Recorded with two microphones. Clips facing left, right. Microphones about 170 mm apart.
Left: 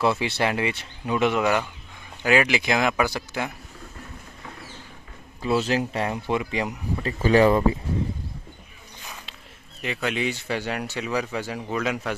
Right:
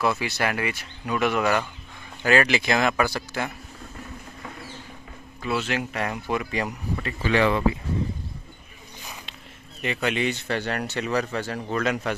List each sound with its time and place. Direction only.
0.0 s speech: 25° left (ahead or behind)
5.4 s speech: 30° left (ahead or behind)
7.2 s speech: 40° left (ahead or behind)
9.8 s a man's voice: centre (ahead or behind)